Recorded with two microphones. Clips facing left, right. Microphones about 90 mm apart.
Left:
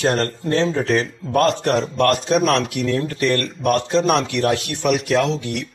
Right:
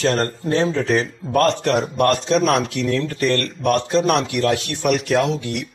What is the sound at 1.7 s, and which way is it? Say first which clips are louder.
Speech: even; 15° right (ahead or behind).